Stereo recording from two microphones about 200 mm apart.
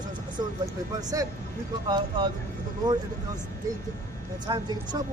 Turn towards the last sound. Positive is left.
turn(degrees=-20)  # may be behind; listen again after turning